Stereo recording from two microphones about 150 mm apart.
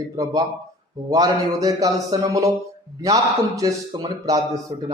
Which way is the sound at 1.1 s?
25° right (ahead or behind).